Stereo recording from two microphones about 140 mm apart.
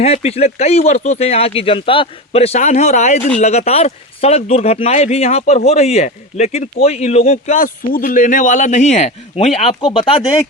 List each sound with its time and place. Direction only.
0.0 s speech: 45° left (ahead or behind)
7.5 s a man's voice: 80° left; by 9.5 s 50° left (ahead or behind)